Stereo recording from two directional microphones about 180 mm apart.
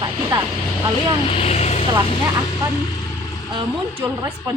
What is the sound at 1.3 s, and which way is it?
Speech, 35° left (ahead or behind).